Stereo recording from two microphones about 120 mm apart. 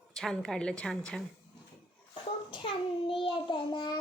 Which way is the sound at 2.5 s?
45° left (ahead or behind).